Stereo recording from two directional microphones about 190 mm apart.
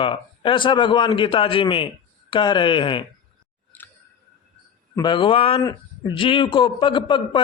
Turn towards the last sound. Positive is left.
turn(degrees=25)  # may be behind; listen again after turning